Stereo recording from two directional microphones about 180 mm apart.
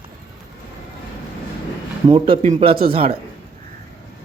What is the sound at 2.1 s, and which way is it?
A man's voice, 30° right (ahead or behind).